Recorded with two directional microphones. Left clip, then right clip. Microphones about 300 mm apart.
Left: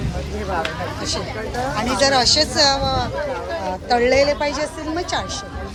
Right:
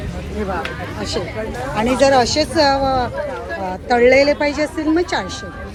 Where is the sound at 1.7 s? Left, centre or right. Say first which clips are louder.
Right 4 dB; right.